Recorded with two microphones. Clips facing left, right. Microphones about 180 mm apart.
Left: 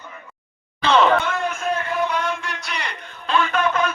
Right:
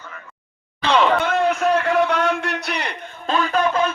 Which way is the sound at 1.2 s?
60° right (ahead or behind).